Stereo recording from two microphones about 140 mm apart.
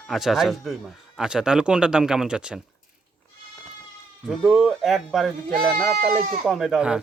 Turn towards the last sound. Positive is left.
turn(degrees=-5)  # may be behind; listen again after turning